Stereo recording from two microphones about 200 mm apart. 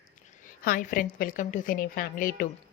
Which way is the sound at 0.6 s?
45° left (ahead or behind).